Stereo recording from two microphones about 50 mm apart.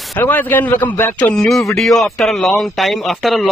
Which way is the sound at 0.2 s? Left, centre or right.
Left.